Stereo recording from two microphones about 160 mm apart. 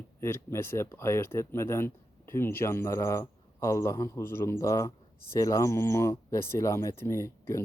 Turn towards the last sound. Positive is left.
turn(degrees=20)  # may be behind; listen again after turning